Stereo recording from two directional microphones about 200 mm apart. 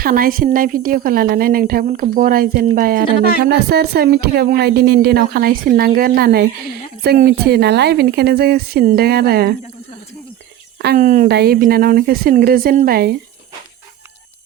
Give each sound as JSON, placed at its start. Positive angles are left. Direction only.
{"t": 0.0, "sound": "speech", "side_deg": -45}
{"t": 10.8, "sound": "cricket", "side_deg": -55}
{"t": 11.0, "sound": "speech", "side_deg": -40}
{"t": 11.3, "sound": "speech", "side_deg": -50}